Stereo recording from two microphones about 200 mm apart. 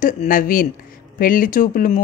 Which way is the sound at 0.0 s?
40° left (ahead or behind).